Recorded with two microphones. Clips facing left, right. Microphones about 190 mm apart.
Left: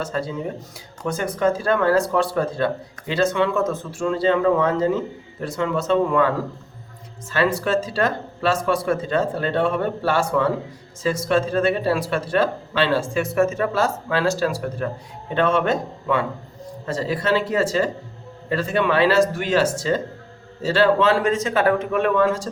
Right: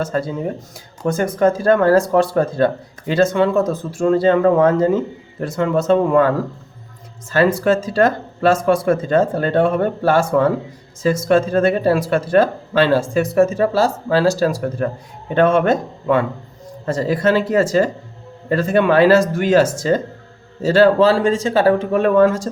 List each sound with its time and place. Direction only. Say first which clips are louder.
0.0 s speech: right 5 dB; 45° right (ahead or behind)